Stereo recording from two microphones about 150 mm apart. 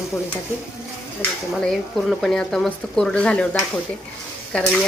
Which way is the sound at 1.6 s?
Centre (ahead or behind).